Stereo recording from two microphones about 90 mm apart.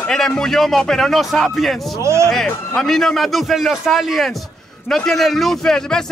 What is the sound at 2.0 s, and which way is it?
Speech, 30° right (ahead or behind).